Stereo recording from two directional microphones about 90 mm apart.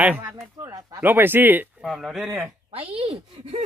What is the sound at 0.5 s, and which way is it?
Speech, 40° right (ahead or behind).